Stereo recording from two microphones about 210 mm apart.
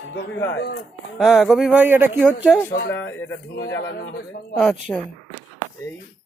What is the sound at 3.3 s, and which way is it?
Speech, 60° left (ahead or behind).